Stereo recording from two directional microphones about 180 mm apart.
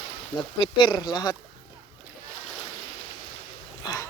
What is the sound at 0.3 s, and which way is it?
Speech, 25° left (ahead or behind).